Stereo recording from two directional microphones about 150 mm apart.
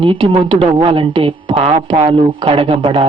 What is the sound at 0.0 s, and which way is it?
Speech, 35° right (ahead or behind).